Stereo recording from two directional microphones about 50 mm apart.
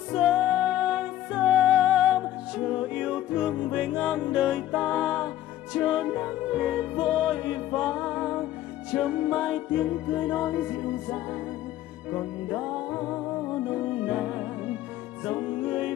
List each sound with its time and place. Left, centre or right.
0.1 s music: centre
2.5 s music: centre